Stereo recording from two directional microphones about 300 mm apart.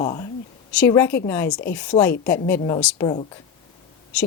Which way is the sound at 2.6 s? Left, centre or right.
Left.